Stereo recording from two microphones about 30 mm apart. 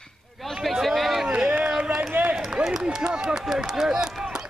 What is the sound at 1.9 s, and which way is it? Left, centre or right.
Run, right.